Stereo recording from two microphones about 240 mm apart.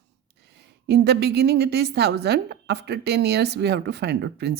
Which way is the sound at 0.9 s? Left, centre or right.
Right.